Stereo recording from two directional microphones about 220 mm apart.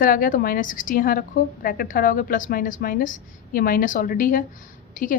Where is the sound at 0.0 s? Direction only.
40° left (ahead or behind).